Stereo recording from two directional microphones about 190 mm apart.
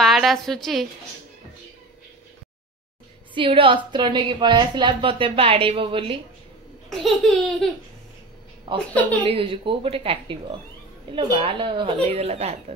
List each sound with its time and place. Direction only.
0.0 s a woman's voice: centre (ahead or behind)
3.3 s a woman's voice: 25° right (ahead or behind)
6.9 s laughter: centre (ahead or behind)
9.2 s a woman's voice: 30° right (ahead or behind)